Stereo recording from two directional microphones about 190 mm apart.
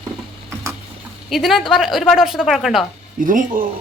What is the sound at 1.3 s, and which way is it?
A woman's voice, centre (ahead or behind).